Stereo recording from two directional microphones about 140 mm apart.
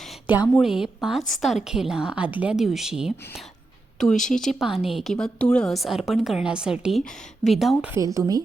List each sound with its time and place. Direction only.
0.6 s a woman's voice: 5° right (ahead or behind)
7.9 s a woman's voice: 20° right (ahead or behind)